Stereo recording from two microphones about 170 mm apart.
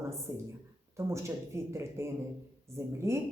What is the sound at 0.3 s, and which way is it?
A man's voice, 15° right (ahead or behind).